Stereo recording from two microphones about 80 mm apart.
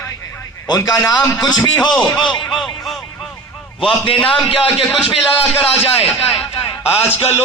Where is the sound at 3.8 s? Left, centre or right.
Left.